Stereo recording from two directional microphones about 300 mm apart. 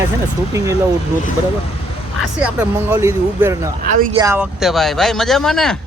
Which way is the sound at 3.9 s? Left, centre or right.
Right.